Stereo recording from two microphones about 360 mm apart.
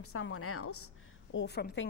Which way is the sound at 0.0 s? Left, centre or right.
Left.